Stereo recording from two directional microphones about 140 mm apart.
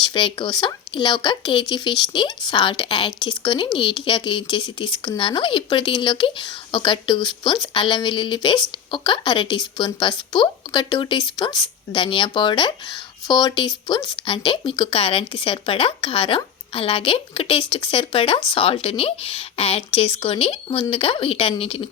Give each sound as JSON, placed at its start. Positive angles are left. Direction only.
{"t": 0.0, "sound": "speech", "side_deg": 35}